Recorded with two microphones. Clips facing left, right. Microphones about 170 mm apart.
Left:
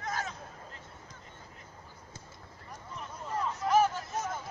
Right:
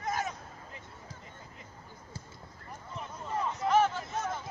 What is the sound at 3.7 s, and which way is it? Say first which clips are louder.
Hubbub: left 1 dB; 10° left (ahead or behind).